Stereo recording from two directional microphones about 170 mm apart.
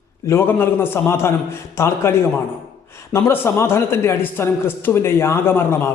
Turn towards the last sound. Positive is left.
turn(degrees=15)  # may be behind; listen again after turning